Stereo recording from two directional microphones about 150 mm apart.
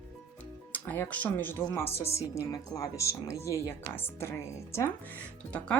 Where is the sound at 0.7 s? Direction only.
15° left (ahead or behind).